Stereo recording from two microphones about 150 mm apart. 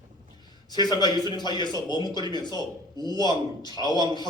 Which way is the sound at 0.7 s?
25° left (ahead or behind).